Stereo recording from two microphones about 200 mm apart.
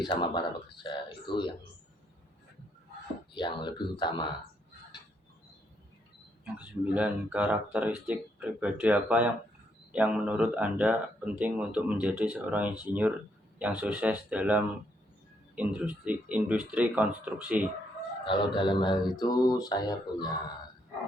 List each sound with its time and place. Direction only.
0.0 s speech: 25° left (ahead or behind)
3.3 s speech: 25° left (ahead or behind)
6.4 s speech: 5° right (ahead or behind)
18.3 s speech: 25° left (ahead or behind)